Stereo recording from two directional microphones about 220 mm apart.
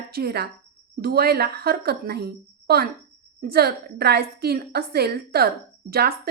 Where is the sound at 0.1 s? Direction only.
45° right (ahead or behind).